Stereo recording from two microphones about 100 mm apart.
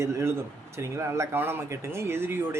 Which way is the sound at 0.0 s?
30° right (ahead or behind).